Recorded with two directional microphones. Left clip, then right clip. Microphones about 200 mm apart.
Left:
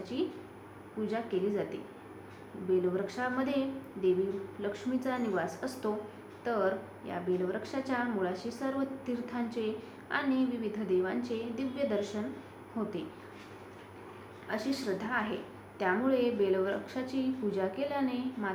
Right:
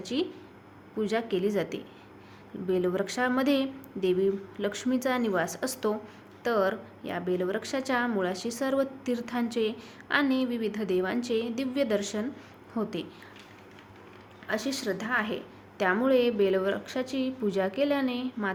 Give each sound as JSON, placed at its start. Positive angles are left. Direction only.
{"t": 0.0, "sound": "a woman's voice", "side_deg": -55}
{"t": 4.6, "sound": "a woman's voice", "side_deg": -60}
{"t": 14.4, "sound": "a woman's voice", "side_deg": -55}